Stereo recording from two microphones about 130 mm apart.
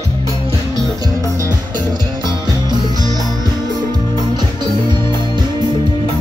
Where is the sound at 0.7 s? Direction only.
25° right (ahead or behind).